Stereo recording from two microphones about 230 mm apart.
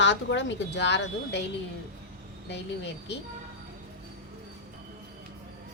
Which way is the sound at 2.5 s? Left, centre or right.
Left.